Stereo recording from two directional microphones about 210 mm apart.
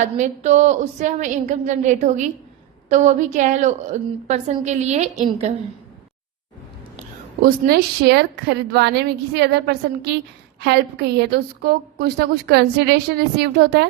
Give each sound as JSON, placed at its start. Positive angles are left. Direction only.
{"t": 0.4, "sound": "a woman's voice", "side_deg": -35}
{"t": 7.4, "sound": "a woman's voice", "side_deg": -50}